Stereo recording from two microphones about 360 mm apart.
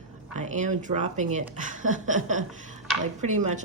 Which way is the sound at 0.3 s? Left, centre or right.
Centre.